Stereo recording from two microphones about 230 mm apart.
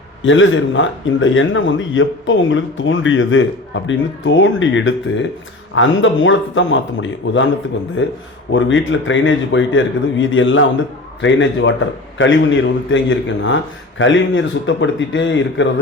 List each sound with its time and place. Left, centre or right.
0.2 s a man's voice: left